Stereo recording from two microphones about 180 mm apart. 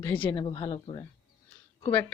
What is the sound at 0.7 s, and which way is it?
Speech, 30° left (ahead or behind).